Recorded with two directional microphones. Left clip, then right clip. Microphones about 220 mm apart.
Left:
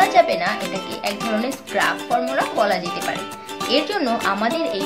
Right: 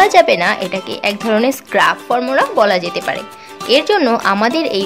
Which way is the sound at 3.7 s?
50° right (ahead or behind).